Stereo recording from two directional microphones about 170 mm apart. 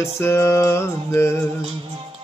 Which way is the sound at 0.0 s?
15° left (ahead or behind).